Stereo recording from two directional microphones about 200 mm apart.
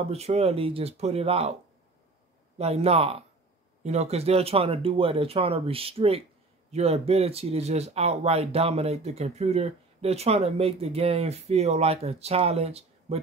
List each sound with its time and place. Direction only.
0.0 s speech: 30° right (ahead or behind)
2.5 s speech: 30° right (ahead or behind)